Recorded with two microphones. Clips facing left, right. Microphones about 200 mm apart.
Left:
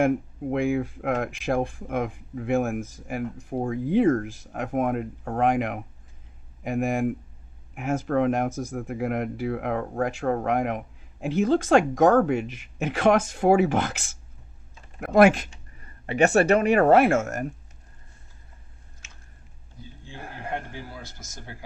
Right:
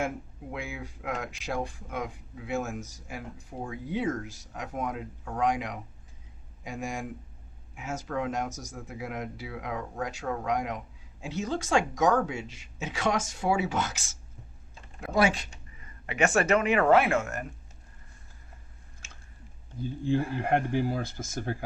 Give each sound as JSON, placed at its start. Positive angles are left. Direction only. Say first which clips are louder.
{"t": 0.5, "sound": "speech", "louder": "left 14 dB", "side_deg": 55}
{"t": 15.0, "sound": "speech", "louder": "left 8 dB", "side_deg": 55}
{"t": 16.0, "sound": "speech", "louder": "left 6 dB", "side_deg": 35}
{"t": 20.7, "sound": "speech", "louder": "right 11 dB", "side_deg": -55}